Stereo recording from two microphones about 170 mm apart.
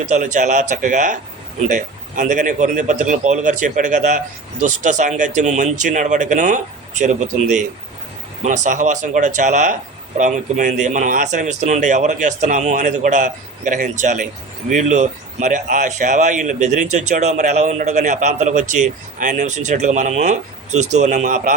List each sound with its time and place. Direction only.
0.1 s speech: 45° right (ahead or behind)